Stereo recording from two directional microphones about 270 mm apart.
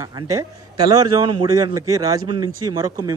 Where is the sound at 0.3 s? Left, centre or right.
Centre.